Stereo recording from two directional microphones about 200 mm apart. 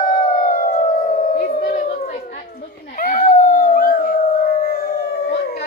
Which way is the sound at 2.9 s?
45° left (ahead or behind).